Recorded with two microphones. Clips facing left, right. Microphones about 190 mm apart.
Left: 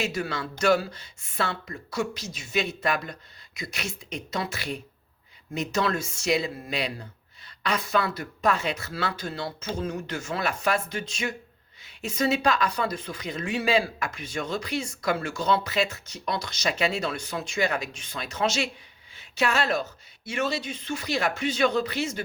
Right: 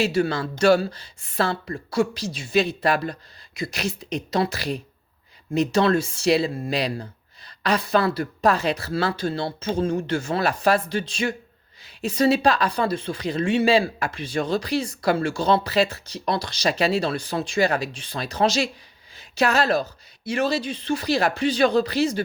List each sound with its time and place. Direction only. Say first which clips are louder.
0.0 s speech: right 8 dB; 30° right (ahead or behind)